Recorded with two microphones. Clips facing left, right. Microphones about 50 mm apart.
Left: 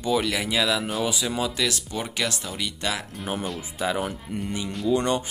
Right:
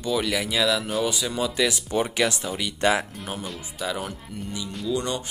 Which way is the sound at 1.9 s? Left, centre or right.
Centre.